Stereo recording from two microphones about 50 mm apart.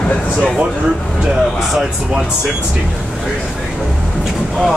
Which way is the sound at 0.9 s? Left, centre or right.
Centre.